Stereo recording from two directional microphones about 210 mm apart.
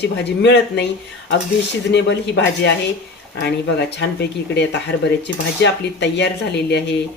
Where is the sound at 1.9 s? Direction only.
60° left (ahead or behind).